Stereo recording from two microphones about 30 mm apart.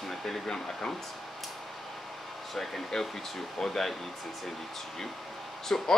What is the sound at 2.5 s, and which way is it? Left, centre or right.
Speech, centre.